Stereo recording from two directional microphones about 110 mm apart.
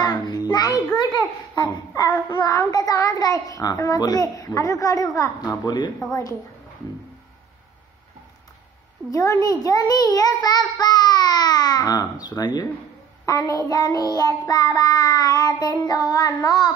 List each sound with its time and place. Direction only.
0.0 s child singing: 35° left (ahead or behind)
9.1 s a child's voice: 30° left (ahead or behind)
13.2 s child singing: 30° left (ahead or behind)